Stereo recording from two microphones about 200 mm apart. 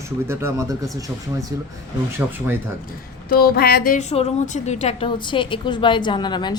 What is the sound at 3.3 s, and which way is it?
Music, 50° left (ahead or behind).